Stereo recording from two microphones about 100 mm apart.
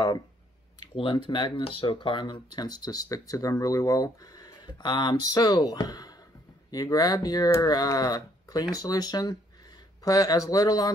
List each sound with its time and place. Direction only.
0.9 s speech: 55° left (ahead or behind); by 10.9 s 40° left (ahead or behind)